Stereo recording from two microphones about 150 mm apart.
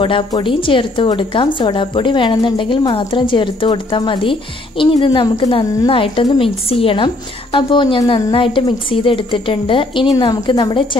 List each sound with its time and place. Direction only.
0.0 s a woman's voice: 35° left (ahead or behind)